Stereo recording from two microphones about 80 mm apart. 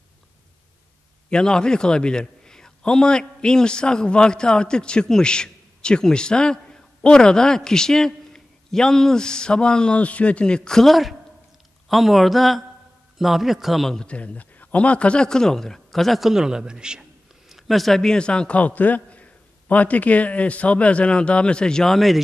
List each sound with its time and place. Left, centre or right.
1.3 s a man's voice: centre
14.0 s a man's voice: centre